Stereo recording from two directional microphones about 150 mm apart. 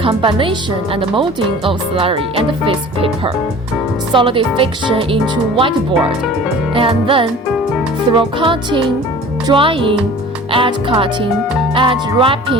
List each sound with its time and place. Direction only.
0.0 s speech: 35° right (ahead or behind)
6.7 s speech: 35° right (ahead or behind)